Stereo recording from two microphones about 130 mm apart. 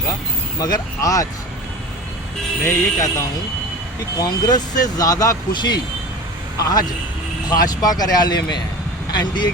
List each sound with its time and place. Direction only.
0.6 s speech: 30° left (ahead or behind)
2.6 s speech: 25° left (ahead or behind)